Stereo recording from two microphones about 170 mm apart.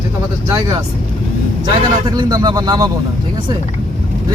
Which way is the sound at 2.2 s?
25° right (ahead or behind).